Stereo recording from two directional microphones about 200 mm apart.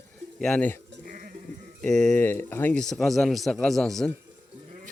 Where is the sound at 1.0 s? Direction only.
45° right (ahead or behind).